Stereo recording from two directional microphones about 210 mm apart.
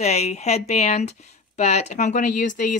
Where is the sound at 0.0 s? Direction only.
30° left (ahead or behind).